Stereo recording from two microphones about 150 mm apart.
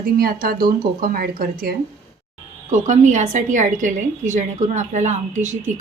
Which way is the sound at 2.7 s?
55° right (ahead or behind).